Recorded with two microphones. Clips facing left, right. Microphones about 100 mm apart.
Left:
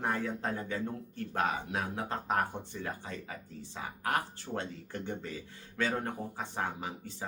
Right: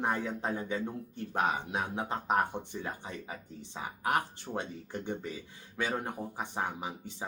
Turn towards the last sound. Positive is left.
turn(degrees=-15)  # may be behind; listen again after turning